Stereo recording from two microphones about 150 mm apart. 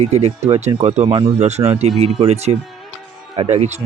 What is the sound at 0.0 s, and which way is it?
Speech, 45° right (ahead or behind).